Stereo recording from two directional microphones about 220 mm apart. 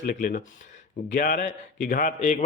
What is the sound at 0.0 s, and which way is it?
A man's voice, 40° left (ahead or behind).